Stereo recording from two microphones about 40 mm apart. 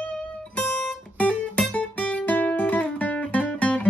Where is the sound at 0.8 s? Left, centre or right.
Left.